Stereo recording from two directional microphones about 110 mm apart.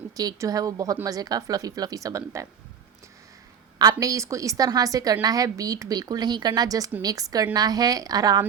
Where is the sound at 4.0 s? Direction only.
30° right (ahead or behind).